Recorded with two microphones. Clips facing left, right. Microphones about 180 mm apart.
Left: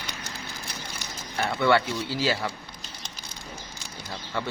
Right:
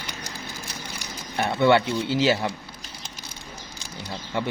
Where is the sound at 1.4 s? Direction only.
20° right (ahead or behind).